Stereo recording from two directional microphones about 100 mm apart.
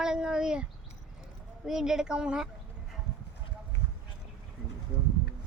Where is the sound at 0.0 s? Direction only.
5° right (ahead or behind).